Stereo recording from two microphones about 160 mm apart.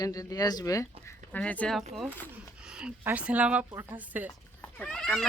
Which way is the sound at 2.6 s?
5° right (ahead or behind).